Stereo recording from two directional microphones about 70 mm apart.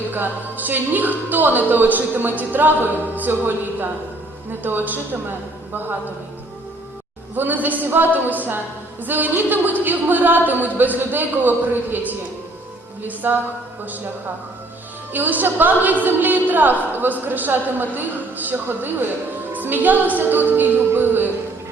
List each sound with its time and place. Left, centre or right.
0.1 s a woman's voice: right
7.3 s a woman's voice: right
15.1 s a woman's voice: right